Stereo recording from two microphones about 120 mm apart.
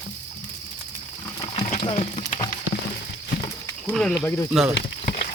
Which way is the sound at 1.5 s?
60° left (ahead or behind).